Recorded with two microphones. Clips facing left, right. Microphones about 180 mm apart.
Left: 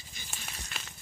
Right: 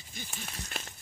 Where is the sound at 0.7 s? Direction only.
45° right (ahead or behind).